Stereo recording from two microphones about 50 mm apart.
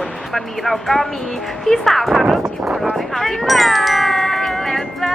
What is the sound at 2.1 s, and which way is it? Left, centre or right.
Speech, centre.